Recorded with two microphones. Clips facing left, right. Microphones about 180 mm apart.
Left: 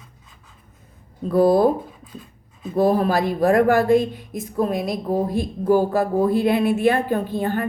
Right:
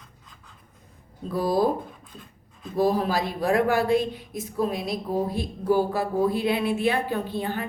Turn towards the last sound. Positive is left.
turn(degrees=50)  # may be behind; listen again after turning